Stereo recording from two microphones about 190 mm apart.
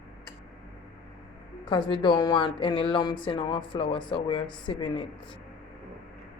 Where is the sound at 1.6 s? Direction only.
25° left (ahead or behind).